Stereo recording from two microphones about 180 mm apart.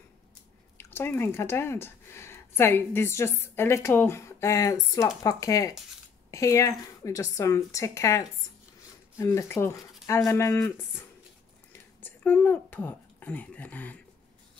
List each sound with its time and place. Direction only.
0.7 s speech: 10° left (ahead or behind)